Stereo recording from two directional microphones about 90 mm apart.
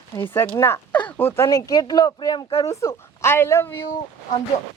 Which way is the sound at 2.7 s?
30° left (ahead or behind).